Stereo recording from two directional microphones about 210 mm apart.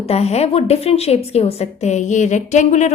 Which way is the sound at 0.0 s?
30° left (ahead or behind).